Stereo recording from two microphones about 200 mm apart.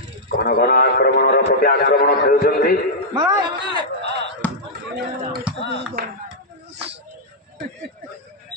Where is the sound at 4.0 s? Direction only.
55° right (ahead or behind).